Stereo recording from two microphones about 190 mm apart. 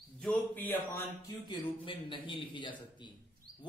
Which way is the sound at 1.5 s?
25° left (ahead or behind).